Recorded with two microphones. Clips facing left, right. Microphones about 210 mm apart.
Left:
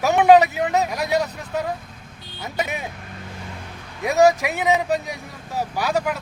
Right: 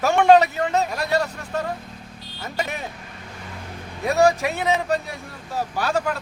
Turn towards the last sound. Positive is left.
turn(degrees=10)  # may be behind; listen again after turning